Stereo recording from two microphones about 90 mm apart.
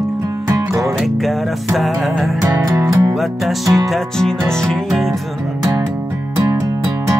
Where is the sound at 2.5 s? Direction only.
35° right (ahead or behind).